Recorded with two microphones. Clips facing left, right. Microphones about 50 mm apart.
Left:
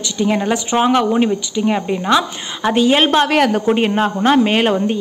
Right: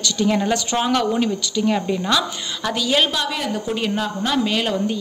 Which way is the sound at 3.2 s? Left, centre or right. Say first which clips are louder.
Left 10 dB; left.